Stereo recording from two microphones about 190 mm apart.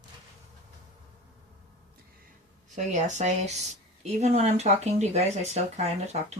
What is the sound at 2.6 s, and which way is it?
Speech, 40° right (ahead or behind).